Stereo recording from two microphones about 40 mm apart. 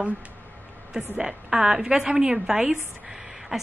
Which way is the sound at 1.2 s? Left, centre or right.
Centre.